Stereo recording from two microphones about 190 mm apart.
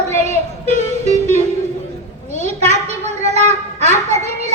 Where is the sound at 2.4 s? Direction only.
35° right (ahead or behind).